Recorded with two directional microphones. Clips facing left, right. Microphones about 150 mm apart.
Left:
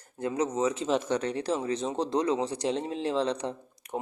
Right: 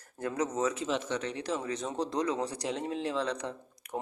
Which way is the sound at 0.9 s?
40° left (ahead or behind).